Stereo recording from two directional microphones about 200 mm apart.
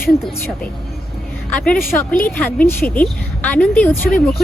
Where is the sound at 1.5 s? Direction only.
5° left (ahead or behind).